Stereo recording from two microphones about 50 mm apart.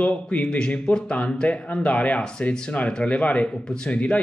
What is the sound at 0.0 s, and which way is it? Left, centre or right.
A man's voice, left.